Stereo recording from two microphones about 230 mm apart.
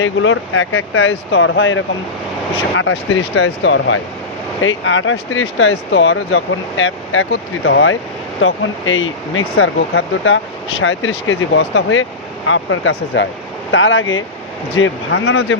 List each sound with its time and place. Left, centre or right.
0.0 s speech: left